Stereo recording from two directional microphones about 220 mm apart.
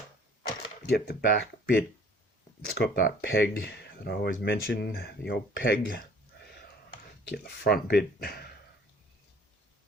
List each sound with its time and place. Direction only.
0.9 s speech: 45° left (ahead or behind)
7.3 s speech: 45° left (ahead or behind)